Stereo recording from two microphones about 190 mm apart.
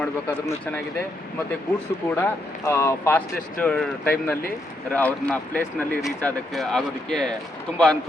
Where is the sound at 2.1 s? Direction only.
10° left (ahead or behind).